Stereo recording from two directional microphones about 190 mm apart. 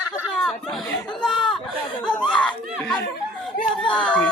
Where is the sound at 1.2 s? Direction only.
Centre (ahead or behind).